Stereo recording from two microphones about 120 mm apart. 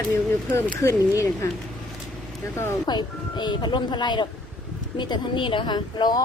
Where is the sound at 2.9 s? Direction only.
40° left (ahead or behind).